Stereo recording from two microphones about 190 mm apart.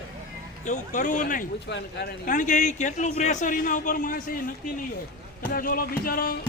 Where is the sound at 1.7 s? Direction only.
65° left (ahead or behind).